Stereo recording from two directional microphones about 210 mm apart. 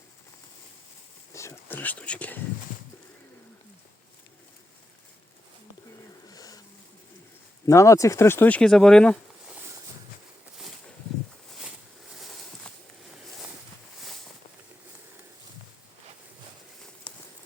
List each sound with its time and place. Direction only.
1.3 s speech: 15° left (ahead or behind)
6.2 s wheeze: 15° left (ahead or behind)
7.7 s speech: 15° left (ahead or behind)
12.1 s a sound: centre (ahead or behind)